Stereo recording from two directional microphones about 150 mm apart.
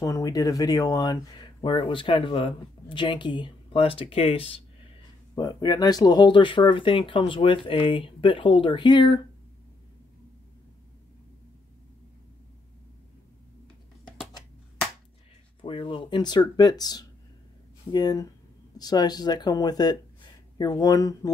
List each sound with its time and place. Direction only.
0.0 s speech: 25° left (ahead or behind); by 4.6 s 40° left (ahead or behind)
5.3 s speech: 25° left (ahead or behind)
15.6 s a sound: 35° left (ahead or behind)
16.5 s speech: 25° left (ahead or behind)